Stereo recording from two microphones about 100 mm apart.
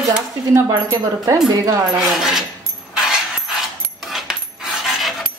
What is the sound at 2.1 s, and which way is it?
Speech, 5° right (ahead or behind).